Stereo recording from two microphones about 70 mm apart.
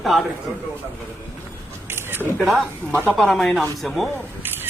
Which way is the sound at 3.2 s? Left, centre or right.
Centre.